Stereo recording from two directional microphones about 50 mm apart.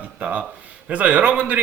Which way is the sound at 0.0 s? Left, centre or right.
Right.